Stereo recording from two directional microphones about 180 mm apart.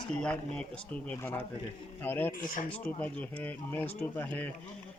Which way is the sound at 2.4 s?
50° left (ahead or behind).